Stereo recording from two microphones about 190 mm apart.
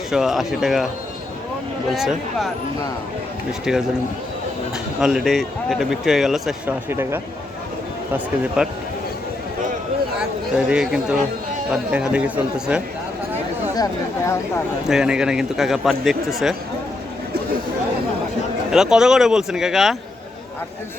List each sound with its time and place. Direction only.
0.1 s speech: centre (ahead or behind)
1.9 s speech: centre (ahead or behind)
4.9 s speech: 5° right (ahead or behind)
6.9 s speech: 15° right (ahead or behind)
8.6 s speech: 5° right (ahead or behind)
10.7 s speech: 5° right (ahead or behind)
13.7 s speech: 20° left (ahead or behind)
14.8 s speech: 5° right (ahead or behind)
18.7 s speech: centre (ahead or behind)